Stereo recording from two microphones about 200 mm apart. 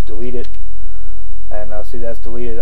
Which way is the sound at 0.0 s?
20° left (ahead or behind).